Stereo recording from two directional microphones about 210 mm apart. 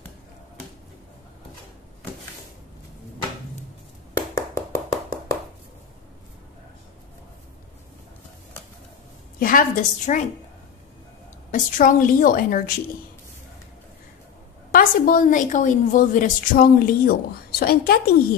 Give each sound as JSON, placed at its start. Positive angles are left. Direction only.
{"t": 4.4, "sound": "a sound", "side_deg": 15}
{"t": 9.4, "sound": "a woman's voice", "side_deg": 40}
{"t": 11.5, "sound": "a woman's voice", "side_deg": 40}
{"t": 14.7, "sound": "a woman's voice", "side_deg": 40}